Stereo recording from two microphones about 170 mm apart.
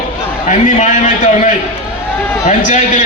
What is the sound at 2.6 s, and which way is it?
Speech, 45° left (ahead or behind).